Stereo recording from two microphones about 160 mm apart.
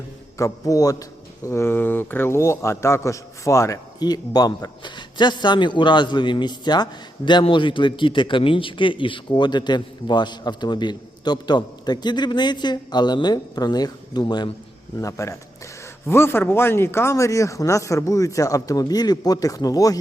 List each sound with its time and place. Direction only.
0.3 s a man's voice: 20° left (ahead or behind)